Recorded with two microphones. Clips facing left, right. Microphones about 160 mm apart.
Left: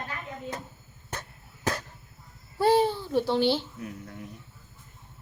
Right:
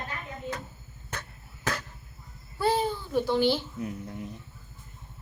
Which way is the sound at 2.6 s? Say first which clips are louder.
Left 4 dB; 35° left (ahead or behind).